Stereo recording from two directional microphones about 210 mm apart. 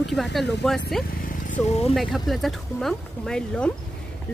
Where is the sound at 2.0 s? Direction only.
Centre (ahead or behind).